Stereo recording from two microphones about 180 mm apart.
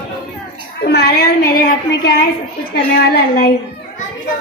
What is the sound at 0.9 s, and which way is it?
A woman's voice, 60° left (ahead or behind).